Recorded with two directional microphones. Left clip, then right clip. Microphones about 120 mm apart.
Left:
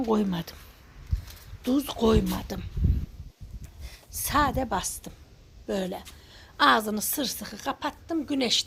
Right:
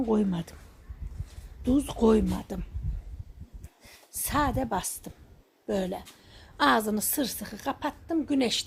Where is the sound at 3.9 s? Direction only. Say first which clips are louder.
Left 4 dB; 25° right (ahead or behind).